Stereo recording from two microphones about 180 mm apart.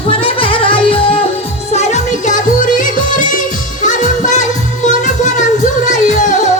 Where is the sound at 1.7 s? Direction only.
40° left (ahead or behind).